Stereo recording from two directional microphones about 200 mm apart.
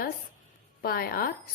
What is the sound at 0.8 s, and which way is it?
Speech, 50° left (ahead or behind).